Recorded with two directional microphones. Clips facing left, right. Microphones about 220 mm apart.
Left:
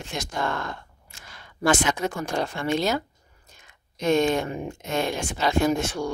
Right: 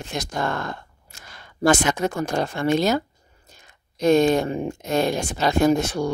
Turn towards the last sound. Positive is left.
turn(degrees=-40)  # may be behind; listen again after turning